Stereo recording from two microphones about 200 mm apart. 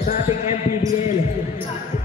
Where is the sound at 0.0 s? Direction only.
35° left (ahead or behind).